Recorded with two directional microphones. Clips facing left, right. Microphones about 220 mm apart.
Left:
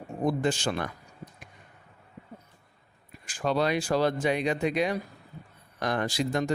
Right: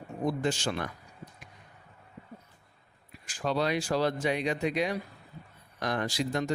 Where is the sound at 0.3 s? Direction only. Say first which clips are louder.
Left 3 dB; 50° left (ahead or behind).